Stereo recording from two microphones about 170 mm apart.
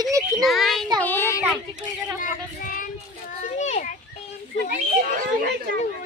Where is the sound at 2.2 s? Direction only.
55° left (ahead or behind).